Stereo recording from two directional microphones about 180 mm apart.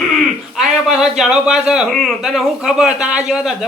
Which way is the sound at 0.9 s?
Centre (ahead or behind).